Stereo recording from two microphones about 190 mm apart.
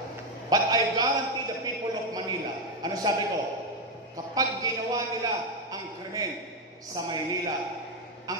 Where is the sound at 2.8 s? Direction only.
20° right (ahead or behind).